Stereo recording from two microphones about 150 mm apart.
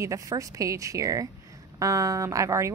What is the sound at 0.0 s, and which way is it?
A woman's voice, 20° right (ahead or behind).